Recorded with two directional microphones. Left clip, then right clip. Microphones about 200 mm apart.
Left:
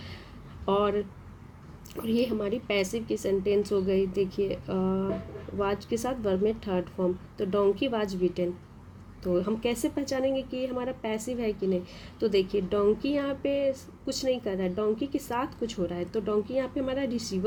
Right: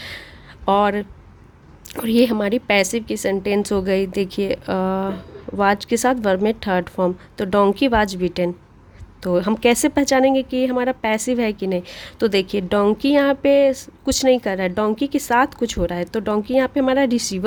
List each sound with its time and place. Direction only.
0.6 s a woman's voice: 45° right (ahead or behind)